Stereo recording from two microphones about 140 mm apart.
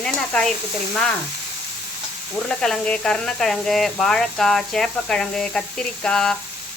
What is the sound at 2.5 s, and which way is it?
Speech, 5° left (ahead or behind).